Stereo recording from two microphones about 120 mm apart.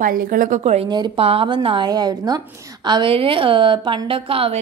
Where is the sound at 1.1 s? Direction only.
50° right (ahead or behind).